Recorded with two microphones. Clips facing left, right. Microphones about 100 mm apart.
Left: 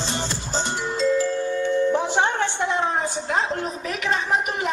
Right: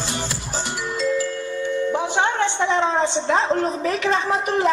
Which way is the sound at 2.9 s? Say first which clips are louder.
Right 4 dB; 25° right (ahead or behind).